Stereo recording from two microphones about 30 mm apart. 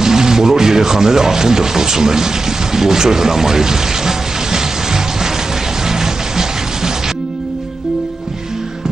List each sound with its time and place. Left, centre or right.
0.0 s speech: centre
5.9 s music: centre